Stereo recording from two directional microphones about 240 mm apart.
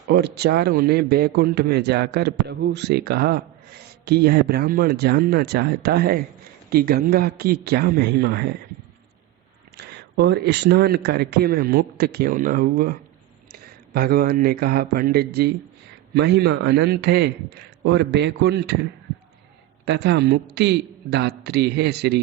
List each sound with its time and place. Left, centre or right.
0.1 s a man's voice: right
9.7 s a man's voice: right